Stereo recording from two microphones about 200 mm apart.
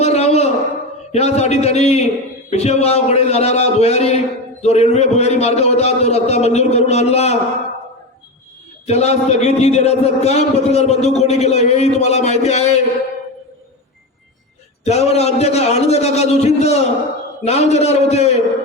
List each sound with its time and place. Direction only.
0.0 s a sound: 30° left (ahead or behind)
1.1 s a man's voice: 35° left (ahead or behind)
8.9 s a man's voice: 35° left (ahead or behind)
14.8 s a man's voice: 35° left (ahead or behind)